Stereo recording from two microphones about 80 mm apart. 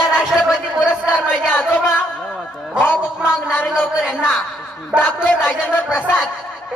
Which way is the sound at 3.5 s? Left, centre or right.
Centre.